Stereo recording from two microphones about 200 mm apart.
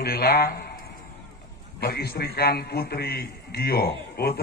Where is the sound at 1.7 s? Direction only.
50° left (ahead or behind).